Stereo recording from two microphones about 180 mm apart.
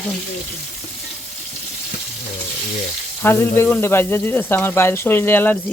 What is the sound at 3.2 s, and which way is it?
Speech, 10° left (ahead or behind).